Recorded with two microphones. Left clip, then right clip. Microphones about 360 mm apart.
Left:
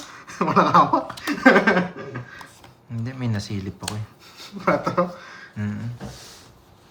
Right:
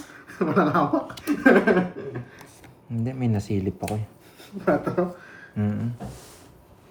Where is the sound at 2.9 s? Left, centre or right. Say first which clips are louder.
Right 2 dB; centre.